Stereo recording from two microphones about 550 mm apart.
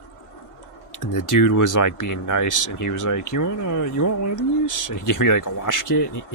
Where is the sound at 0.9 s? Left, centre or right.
Left.